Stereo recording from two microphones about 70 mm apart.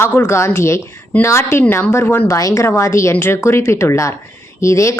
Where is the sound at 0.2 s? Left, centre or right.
Left.